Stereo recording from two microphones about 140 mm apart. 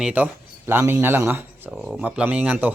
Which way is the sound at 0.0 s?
10° right (ahead or behind).